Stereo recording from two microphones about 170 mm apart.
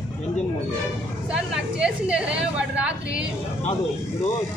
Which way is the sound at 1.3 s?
5° right (ahead or behind).